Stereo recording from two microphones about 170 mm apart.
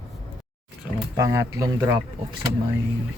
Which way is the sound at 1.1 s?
20° right (ahead or behind).